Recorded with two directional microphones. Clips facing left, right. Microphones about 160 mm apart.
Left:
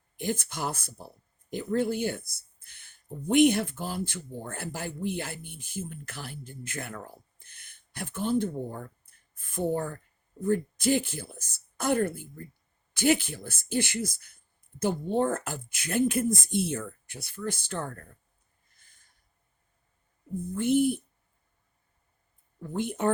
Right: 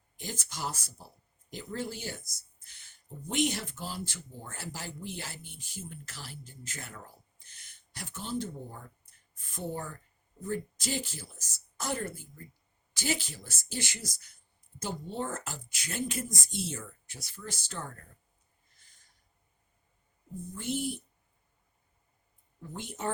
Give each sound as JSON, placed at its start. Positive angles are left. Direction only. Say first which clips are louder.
{"t": 0.2, "sound": "speech", "louder": "left 8 dB", "side_deg": 55}
{"t": 20.6, "sound": "a woman's voice", "louder": "left 10 dB", "side_deg": 55}
{"t": 22.6, "sound": "speech", "louder": "left 9 dB", "side_deg": 55}